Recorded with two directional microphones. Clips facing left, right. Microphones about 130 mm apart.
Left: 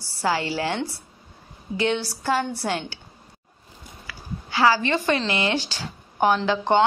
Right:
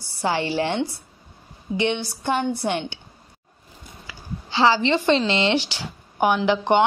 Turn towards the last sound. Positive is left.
turn(degrees=-15)  # may be behind; listen again after turning